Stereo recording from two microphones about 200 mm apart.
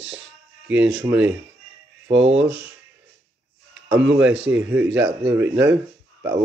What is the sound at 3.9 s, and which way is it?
Speech, 65° right (ahead or behind).